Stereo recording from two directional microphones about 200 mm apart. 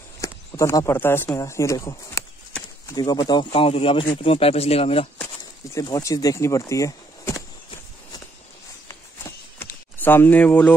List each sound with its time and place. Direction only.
0.2 s speech: 15° left (ahead or behind)
5.8 s speech: 15° left (ahead or behind)
9.6 s a sound: 10° left (ahead or behind)